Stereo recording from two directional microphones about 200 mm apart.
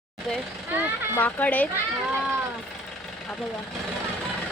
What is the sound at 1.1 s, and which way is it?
Speech, 10° left (ahead or behind).